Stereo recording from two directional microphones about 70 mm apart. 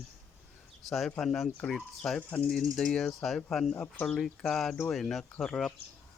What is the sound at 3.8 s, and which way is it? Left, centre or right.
Speech, left.